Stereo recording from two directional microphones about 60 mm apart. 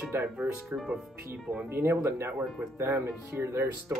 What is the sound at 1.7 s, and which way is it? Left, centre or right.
Speech, right.